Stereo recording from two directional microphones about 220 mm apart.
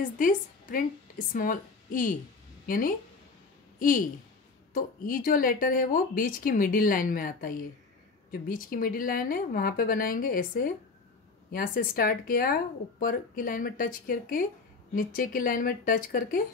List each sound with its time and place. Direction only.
0.2 s a woman's voice: 40° left (ahead or behind)